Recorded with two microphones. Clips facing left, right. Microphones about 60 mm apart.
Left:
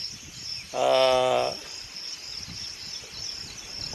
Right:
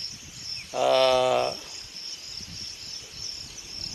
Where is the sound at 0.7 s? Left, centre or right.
Centre.